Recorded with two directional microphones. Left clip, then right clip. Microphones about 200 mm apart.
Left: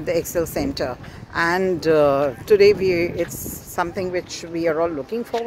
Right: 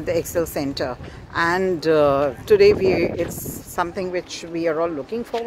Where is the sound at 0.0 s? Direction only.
10° left (ahead or behind).